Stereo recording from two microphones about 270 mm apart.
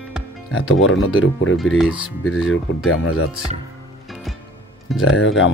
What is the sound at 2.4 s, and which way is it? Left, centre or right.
Speech, left.